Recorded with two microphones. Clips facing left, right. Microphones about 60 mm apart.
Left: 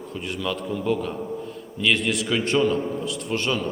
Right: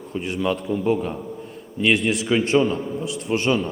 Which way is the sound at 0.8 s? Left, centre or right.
Centre.